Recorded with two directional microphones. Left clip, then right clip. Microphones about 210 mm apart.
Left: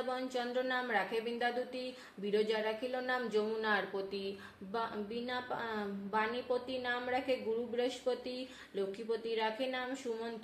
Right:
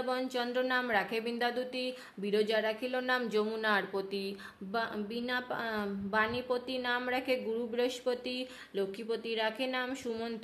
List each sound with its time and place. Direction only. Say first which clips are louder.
0.1 s a woman's voice: right 5 dB; 40° right (ahead or behind)